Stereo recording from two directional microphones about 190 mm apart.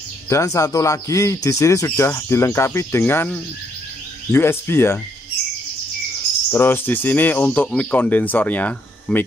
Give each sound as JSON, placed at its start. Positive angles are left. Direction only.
{"t": 0.3, "sound": "speech", "side_deg": 15}
{"t": 6.5, "sound": "speech", "side_deg": 10}